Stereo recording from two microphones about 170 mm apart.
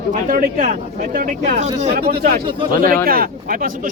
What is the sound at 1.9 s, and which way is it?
A man's voice, 65° right (ahead or behind).